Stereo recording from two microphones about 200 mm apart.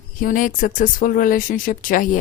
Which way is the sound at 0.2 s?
40° left (ahead or behind).